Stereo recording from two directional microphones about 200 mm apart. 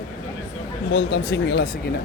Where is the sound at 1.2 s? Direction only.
55° left (ahead or behind).